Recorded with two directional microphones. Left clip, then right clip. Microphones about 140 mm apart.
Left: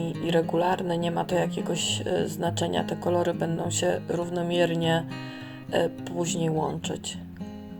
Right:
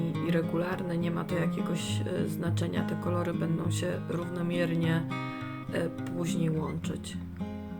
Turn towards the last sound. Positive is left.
turn(degrees=0)  # may be behind; listen again after turning